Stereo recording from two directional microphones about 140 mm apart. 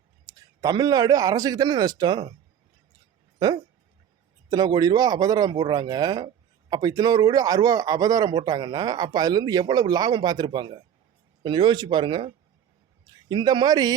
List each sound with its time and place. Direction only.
0.3 s speech: 25° right (ahead or behind)
3.3 s speech: 30° right (ahead or behind)